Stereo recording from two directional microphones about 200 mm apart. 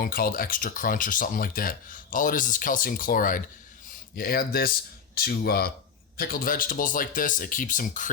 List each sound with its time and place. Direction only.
0.0 s speech: 45° left (ahead or behind)